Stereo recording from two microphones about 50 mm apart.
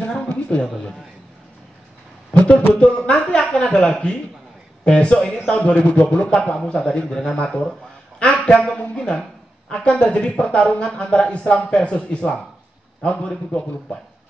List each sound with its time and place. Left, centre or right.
0.3 s speech: left
2.3 s a man's voice: left